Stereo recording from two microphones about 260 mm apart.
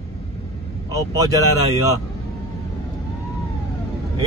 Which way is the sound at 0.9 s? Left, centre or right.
Centre.